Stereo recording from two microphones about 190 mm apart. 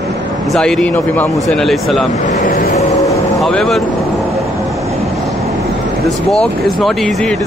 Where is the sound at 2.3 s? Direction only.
40° left (ahead or behind).